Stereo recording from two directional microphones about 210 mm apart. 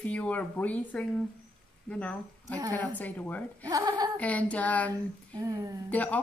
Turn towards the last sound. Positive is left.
turn(degrees=5)  # may be behind; listen again after turning